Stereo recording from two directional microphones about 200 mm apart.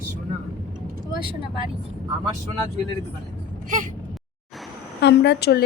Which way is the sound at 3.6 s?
40° right (ahead or behind).